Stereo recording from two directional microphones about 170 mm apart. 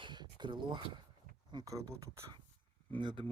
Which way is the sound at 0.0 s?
25° right (ahead or behind).